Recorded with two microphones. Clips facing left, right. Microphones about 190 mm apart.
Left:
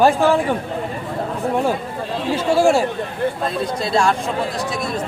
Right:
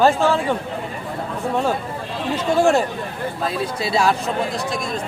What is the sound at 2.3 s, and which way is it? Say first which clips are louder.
Speech: left 1 dB; 10° left (ahead or behind).